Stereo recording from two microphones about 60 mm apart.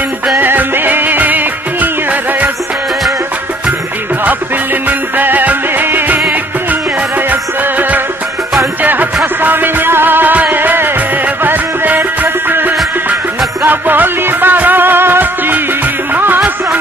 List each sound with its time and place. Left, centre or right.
0.4 s music: right
4.8 s music: right
8.8 s music: right